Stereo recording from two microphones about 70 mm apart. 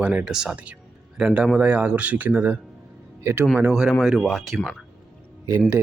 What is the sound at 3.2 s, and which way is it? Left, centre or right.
Speech, right.